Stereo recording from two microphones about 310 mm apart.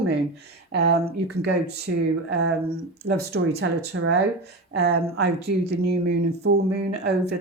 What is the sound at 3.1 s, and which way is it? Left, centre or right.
Speech, right.